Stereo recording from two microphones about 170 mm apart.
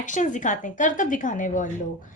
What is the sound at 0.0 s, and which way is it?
A woman's voice, 45° left (ahead or behind).